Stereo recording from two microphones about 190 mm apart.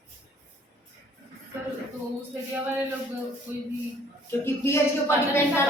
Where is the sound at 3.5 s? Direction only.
10° right (ahead or behind).